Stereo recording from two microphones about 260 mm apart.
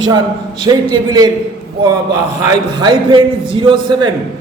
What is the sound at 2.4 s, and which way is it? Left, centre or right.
Speech, centre.